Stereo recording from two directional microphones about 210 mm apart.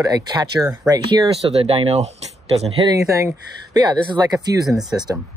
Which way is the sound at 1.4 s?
30° right (ahead or behind).